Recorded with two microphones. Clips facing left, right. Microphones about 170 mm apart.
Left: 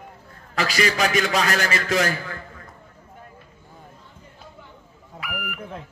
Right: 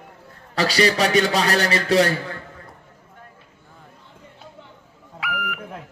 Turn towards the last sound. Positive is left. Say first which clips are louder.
# right 4 dB
turn(degrees=20)  # may be behind; listen again after turning